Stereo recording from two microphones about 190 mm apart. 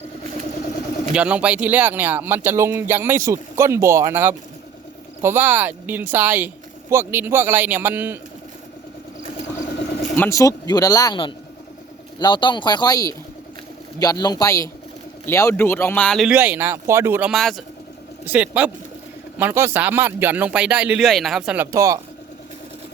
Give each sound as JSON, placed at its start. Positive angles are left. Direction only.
{"t": 1.1, "sound": "speech", "side_deg": -5}
{"t": 10.2, "sound": "speech", "side_deg": 15}